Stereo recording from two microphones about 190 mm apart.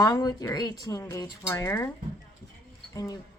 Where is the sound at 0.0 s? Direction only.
20° left (ahead or behind).